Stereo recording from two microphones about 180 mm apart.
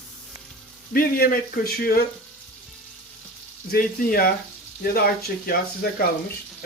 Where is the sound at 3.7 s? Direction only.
55° left (ahead or behind).